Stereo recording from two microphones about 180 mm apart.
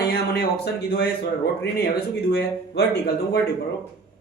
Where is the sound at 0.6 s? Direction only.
65° left (ahead or behind).